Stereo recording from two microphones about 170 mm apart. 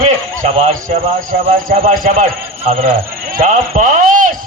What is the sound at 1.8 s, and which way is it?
Speech, 55° right (ahead or behind).